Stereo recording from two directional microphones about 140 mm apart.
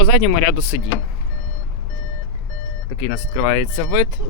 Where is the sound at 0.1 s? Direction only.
40° left (ahead or behind).